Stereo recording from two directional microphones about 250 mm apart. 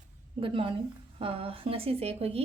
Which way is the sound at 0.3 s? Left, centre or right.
Right.